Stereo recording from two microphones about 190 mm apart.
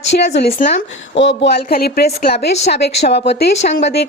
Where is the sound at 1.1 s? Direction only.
70° left (ahead or behind).